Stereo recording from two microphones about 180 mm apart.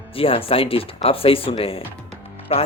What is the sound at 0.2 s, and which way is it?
Speech, 30° left (ahead or behind).